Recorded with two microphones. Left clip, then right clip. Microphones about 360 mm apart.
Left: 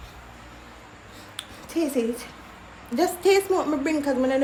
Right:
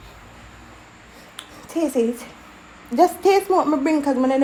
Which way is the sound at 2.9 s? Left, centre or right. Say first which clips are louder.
Right 5 dB; centre.